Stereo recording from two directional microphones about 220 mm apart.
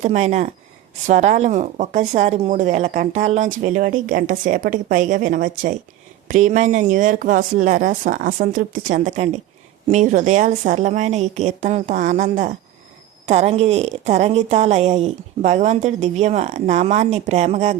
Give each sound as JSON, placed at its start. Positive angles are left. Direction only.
{"t": 0.0, "sound": "a woman's voice", "side_deg": -30}